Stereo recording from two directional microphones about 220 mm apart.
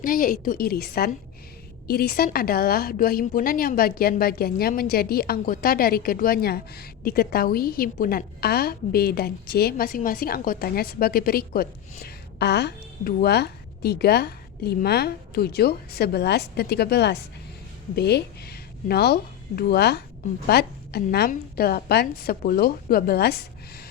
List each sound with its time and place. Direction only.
0.0 s a woman's voice: 40° left (ahead or behind)